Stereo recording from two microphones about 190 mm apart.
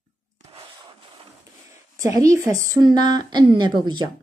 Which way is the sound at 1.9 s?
15° right (ahead or behind).